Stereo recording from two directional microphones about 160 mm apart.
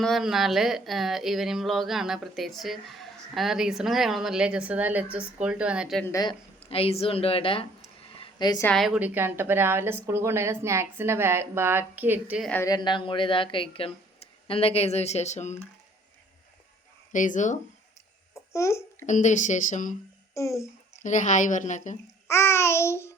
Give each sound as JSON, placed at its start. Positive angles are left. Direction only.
{"t": 0.0, "sound": "speech", "side_deg": 0}
{"t": 6.0, "sound": "speech", "side_deg": 20}
{"t": 6.6, "sound": "speech", "side_deg": 35}
{"t": 8.2, "sound": "a sound", "side_deg": 25}
{"t": 8.6, "sound": "speech", "side_deg": 5}
{"t": 8.9, "sound": "speech", "side_deg": -10}
{"t": 12.4, "sound": "babbling", "side_deg": 5}
{"t": 12.6, "sound": "speech", "side_deg": 25}
{"t": 17.1, "sound": "speech", "side_deg": 55}
{"t": 18.5, "sound": "babbling", "side_deg": 15}
{"t": 19.0, "sound": "speech", "side_deg": 50}
{"t": 20.3, "sound": "a child's voice", "side_deg": 20}
{"t": 21.0, "sound": "speech", "side_deg": 50}
{"t": 22.3, "sound": "babbling", "side_deg": 15}